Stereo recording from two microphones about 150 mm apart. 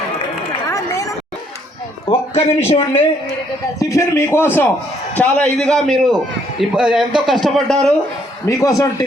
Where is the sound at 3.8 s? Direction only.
20° left (ahead or behind); by 7.9 s centre (ahead or behind).